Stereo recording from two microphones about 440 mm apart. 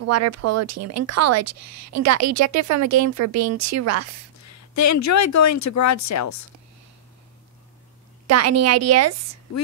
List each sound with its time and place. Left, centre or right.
0.0 s speech: right
4.5 s speech: left
8.3 s speech: right